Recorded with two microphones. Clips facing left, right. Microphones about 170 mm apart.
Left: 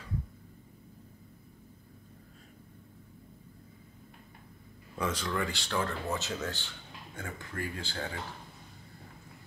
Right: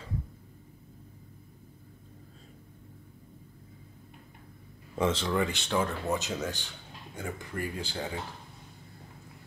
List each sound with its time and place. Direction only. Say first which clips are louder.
4.9 s speech: right 5 dB; 25° right (ahead or behind)